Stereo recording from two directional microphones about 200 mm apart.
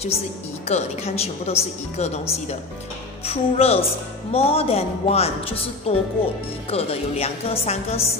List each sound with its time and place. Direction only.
0.7 s a woman's voice: 30° left (ahead or behind)